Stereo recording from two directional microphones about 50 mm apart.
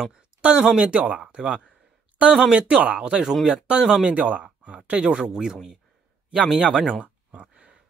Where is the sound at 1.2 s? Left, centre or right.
Centre.